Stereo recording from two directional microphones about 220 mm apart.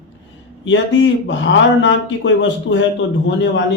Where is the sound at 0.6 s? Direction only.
55° left (ahead or behind).